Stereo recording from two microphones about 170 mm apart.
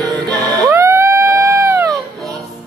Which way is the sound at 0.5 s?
15° right (ahead or behind).